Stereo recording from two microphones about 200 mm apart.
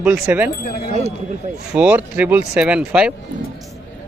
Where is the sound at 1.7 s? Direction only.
5° right (ahead or behind).